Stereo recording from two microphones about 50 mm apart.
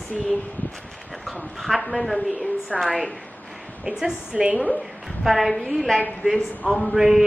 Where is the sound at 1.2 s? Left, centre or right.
Centre.